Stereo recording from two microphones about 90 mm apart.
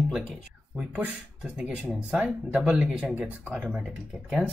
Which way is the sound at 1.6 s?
15° right (ahead or behind).